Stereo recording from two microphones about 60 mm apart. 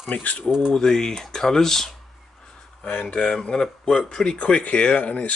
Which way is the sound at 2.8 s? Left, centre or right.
Left.